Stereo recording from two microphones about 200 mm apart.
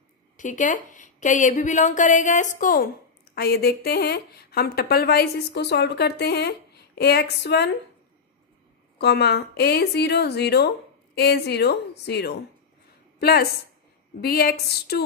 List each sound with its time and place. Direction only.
0.4 s a woman's voice: 40° left (ahead or behind); by 7.7 s 55° left (ahead or behind)
8.9 s a woman's voice: 55° left (ahead or behind)